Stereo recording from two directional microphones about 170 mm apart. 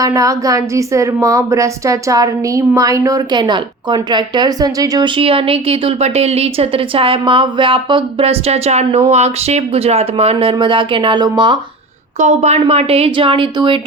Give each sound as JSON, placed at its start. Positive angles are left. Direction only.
{"t": 0.0, "sound": "a woman's voice", "side_deg": -20}
{"t": 12.2, "sound": "speech", "side_deg": -40}